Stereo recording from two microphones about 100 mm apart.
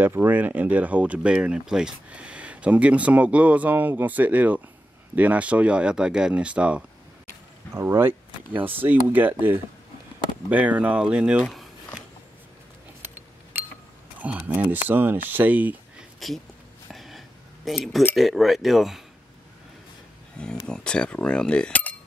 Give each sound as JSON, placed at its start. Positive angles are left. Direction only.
{"t": 0.0, "sound": "speech", "side_deg": -20}
{"t": 7.7, "sound": "speech", "side_deg": -25}
{"t": 13.1, "sound": "a sound", "side_deg": -20}
{"t": 14.2, "sound": "speech", "side_deg": -15}
{"t": 16.2, "sound": "speech", "side_deg": 0}
{"t": 16.9, "sound": "a sound", "side_deg": 0}
{"t": 17.6, "sound": "speech", "side_deg": 0}
{"t": 20.6, "sound": "speech", "side_deg": 10}